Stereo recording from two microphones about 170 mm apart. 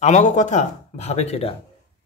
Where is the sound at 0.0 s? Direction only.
45° left (ahead or behind).